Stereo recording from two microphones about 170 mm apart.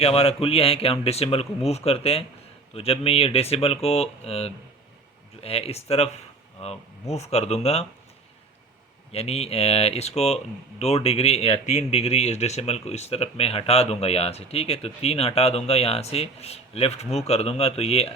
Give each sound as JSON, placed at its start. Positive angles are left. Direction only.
{"t": 0.0, "sound": "speech", "side_deg": 35}
{"t": 9.1, "sound": "speech", "side_deg": 40}